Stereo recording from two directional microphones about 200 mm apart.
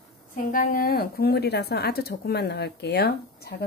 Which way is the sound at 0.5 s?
45° left (ahead or behind).